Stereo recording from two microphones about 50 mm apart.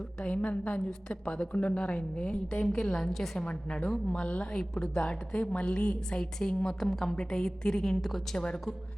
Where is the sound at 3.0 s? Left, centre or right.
Centre.